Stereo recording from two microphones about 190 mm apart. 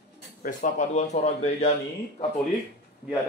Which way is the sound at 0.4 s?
45° left (ahead or behind).